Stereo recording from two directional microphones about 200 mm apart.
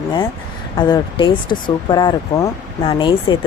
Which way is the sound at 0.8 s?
20° left (ahead or behind).